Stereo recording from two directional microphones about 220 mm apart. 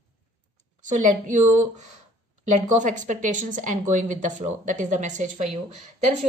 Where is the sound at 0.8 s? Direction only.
35° right (ahead or behind).